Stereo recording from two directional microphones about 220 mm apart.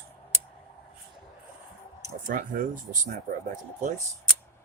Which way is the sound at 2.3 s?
40° right (ahead or behind).